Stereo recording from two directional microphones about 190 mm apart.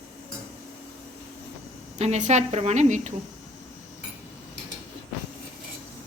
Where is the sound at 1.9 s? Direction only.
35° right (ahead or behind).